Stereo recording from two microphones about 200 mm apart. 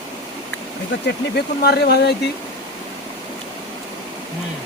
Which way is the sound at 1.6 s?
55° left (ahead or behind).